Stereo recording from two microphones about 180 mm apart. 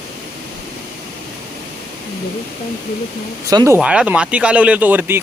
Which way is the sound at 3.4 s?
15° right (ahead or behind).